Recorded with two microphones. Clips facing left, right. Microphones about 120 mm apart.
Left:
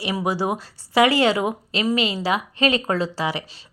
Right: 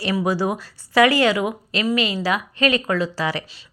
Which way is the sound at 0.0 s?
20° left (ahead or behind).